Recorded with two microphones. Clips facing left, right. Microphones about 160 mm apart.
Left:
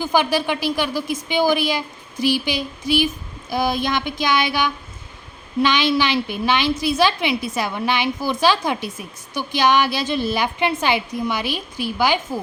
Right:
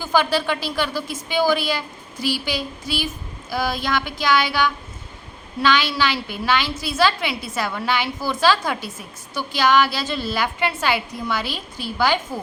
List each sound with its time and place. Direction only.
0.0 s a woman's voice: 15° left (ahead or behind)
3.5 s child singing: 20° left (ahead or behind)
5.6 s a woman's voice: 20° left (ahead or behind)